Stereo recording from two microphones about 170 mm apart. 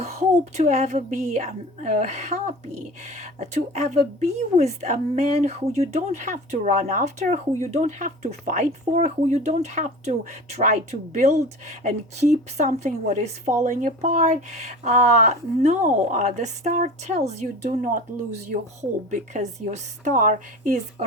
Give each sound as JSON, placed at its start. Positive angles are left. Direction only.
{"t": 0.0, "sound": "speech", "side_deg": -40}